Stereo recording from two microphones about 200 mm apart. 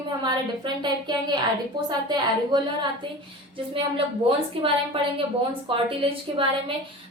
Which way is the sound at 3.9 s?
25° right (ahead or behind).